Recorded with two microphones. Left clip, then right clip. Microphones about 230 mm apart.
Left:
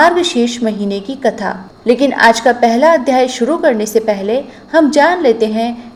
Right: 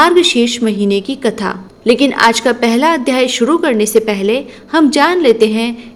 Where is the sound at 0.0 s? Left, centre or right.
Right.